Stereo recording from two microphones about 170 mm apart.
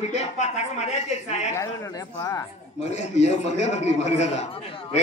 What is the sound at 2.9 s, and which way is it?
A man's voice, 40° left (ahead or behind).